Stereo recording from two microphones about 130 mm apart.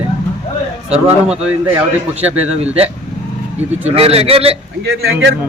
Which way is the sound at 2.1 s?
55° right (ahead or behind).